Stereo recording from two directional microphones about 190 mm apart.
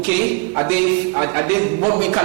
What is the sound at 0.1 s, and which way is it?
A man's voice, 15° right (ahead or behind).